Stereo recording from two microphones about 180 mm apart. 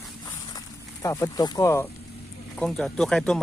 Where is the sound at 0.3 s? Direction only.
20° left (ahead or behind).